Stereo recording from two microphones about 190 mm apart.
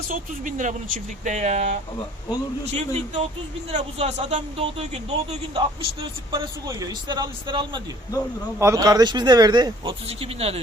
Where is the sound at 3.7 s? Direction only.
35° right (ahead or behind).